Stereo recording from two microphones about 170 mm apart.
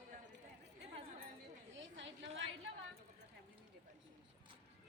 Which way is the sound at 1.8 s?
90° right.